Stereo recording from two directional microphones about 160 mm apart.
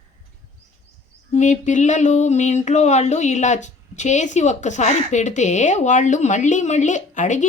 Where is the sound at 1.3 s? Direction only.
50° left (ahead or behind).